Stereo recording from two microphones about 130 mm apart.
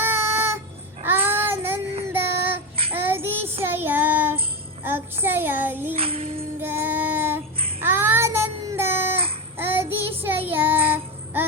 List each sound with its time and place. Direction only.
0.0 s a sound: 15° right (ahead or behind)
1.0 s child singing: 15° right (ahead or behind)
4.8 s music: 15° right (ahead or behind)
5.2 s child singing: 15° right (ahead or behind)
6.0 s music: 50° right (ahead or behind)
6.6 s child singing: 15° right (ahead or behind)